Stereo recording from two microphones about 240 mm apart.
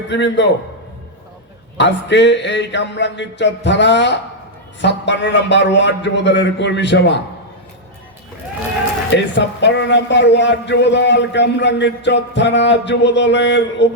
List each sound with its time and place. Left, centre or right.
0.1 s a man's voice: left
1.8 s a man's voice: left
9.1 s a man's voice: left